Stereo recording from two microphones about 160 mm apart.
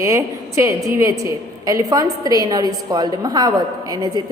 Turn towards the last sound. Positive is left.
turn(degrees=-25)  # may be behind; listen again after turning